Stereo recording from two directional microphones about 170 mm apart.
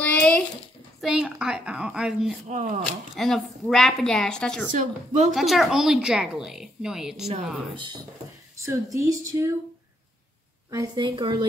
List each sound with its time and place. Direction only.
0.0 s a sound: 10° left (ahead or behind)
1.0 s a woman's voice: 5° right (ahead or behind)
2.4 s speech: 45° right (ahead or behind)
3.2 s a woman's voice: centre (ahead or behind)
4.7 s speech: 45° right (ahead or behind)
5.3 s a woman's voice: centre (ahead or behind)
7.7 s a woman's voice: 25° right (ahead or behind)
10.7 s a woman's voice: 25° right (ahead or behind)